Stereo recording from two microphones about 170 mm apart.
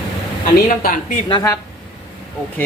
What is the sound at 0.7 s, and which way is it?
Speech, 55° left (ahead or behind).